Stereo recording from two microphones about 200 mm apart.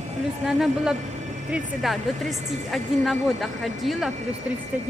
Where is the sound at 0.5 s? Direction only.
Centre (ahead or behind).